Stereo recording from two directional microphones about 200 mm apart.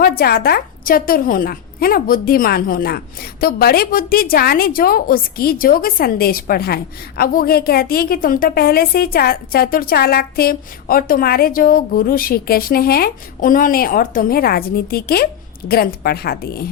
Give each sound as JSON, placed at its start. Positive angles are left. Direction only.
{"t": 0.0, "sound": "a woman's voice", "side_deg": 50}